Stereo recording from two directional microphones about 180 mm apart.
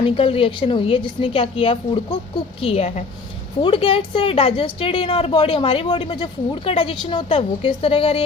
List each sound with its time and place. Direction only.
0.0 s a woman's voice: 30° left (ahead or behind)